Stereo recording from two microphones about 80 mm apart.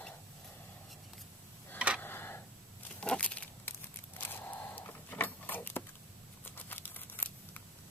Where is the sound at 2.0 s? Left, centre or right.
Left.